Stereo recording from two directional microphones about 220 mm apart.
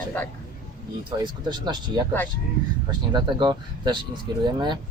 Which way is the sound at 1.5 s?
20° right (ahead or behind).